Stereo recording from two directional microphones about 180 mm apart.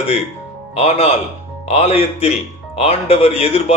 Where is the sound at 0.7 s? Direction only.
35° left (ahead or behind).